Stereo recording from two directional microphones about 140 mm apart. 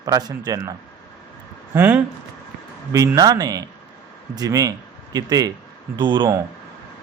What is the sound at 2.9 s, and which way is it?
A man's voice, 25° right (ahead or behind).